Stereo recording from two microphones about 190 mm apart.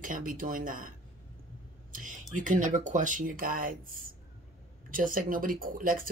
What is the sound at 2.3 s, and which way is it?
Speech, 40° right (ahead or behind).